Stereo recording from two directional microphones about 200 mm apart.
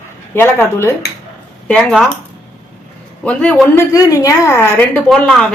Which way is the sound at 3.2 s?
5° left (ahead or behind).